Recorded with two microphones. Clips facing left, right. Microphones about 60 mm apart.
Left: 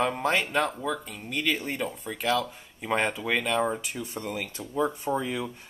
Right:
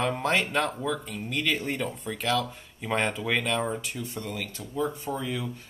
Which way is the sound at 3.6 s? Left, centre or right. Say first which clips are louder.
Left 2 dB; centre.